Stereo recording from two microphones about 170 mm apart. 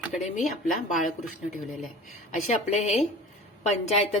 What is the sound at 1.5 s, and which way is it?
Speech, centre (ahead or behind).